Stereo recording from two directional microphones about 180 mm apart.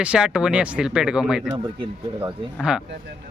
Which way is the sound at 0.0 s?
5° right (ahead or behind).